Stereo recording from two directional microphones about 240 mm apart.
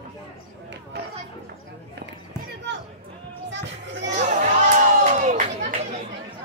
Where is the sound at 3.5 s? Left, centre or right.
Right.